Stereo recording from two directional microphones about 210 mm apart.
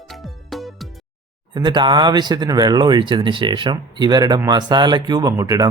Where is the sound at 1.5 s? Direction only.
20° right (ahead or behind).